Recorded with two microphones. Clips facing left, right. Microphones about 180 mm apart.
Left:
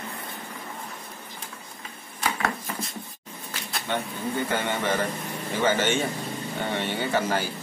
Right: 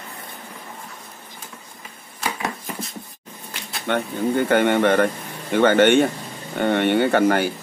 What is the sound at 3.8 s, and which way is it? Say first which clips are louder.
Speech: right 8 dB; 60° right (ahead or behind).